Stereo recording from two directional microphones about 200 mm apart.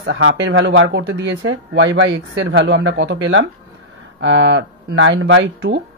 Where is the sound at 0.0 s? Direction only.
65° right (ahead or behind).